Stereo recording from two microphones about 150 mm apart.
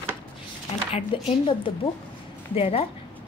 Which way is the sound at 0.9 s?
40° left (ahead or behind).